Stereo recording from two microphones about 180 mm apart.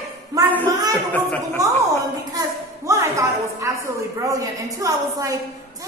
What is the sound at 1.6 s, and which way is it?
A woman's voice, 20° right (ahead or behind).